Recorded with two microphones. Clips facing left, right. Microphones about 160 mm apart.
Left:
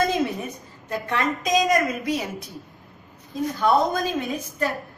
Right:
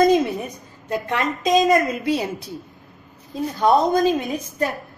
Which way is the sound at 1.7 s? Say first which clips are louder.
Right 4 dB; 30° right (ahead or behind).